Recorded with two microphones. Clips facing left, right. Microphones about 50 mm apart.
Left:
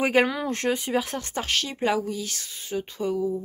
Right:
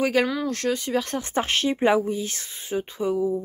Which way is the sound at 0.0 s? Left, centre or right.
Left.